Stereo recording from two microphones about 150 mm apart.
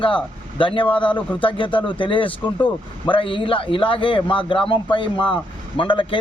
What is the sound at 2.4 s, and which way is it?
Speech, 10° left (ahead or behind).